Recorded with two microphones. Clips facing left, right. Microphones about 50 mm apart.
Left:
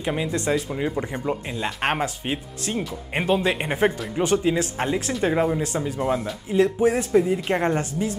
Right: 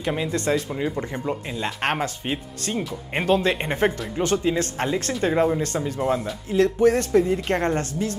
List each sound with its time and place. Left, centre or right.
0.1 s speech: centre
4.2 s speech: centre
5.9 s speech: centre
6.5 s speech: centre